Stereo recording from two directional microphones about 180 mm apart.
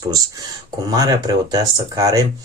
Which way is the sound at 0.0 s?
20° right (ahead or behind).